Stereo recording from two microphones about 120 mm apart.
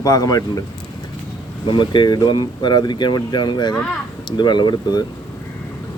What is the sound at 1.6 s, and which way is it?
Speech, 40° left (ahead or behind).